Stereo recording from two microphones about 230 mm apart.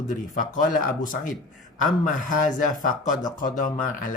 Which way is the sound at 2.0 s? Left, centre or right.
Left.